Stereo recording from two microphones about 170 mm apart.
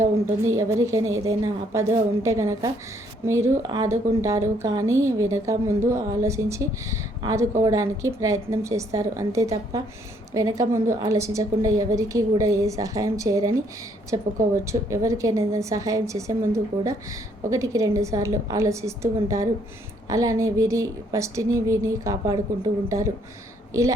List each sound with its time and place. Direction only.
0.0 s a woman's voice: 20° right (ahead or behind)
14.5 s a woman's voice: 15° right (ahead or behind)